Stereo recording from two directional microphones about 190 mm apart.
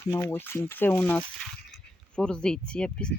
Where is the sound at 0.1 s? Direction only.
15° left (ahead or behind).